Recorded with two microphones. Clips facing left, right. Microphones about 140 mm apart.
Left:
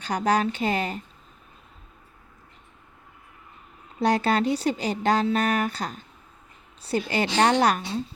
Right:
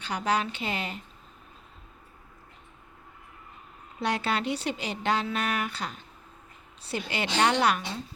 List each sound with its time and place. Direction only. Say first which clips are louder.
0.0 s speech: left 5 dB; 45° left (ahead or behind)
4.0 s a woman's voice: left 6 dB; 40° left (ahead or behind)